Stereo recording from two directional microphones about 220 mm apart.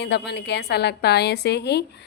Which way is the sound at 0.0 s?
50° left (ahead or behind).